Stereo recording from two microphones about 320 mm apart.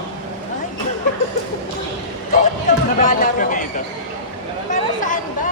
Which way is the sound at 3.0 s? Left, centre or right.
Left.